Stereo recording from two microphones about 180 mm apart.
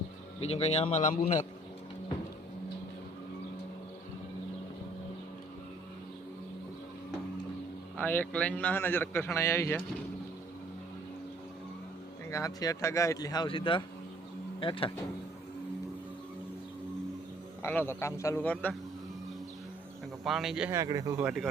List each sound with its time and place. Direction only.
0.3 s a man's voice: 35° left (ahead or behind)
7.9 s speech: 10° left (ahead or behind)
12.3 s speech: 20° left (ahead or behind)
17.6 s speech: 10° left (ahead or behind)
20.2 s speech: centre (ahead or behind)
20.7 s speech: 20° right (ahead or behind)